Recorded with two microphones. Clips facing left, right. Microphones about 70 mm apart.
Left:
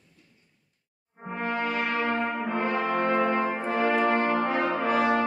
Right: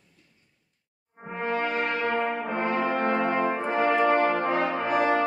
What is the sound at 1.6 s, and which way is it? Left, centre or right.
Brass instrument, right.